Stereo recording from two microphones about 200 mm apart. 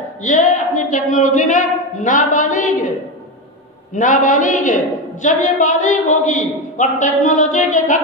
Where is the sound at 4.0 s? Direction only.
40° left (ahead or behind).